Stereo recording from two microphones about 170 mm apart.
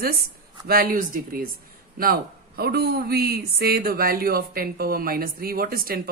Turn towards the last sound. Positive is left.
turn(degrees=-60)  # may be behind; listen again after turning